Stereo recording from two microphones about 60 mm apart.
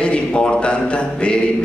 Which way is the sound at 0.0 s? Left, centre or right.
Centre.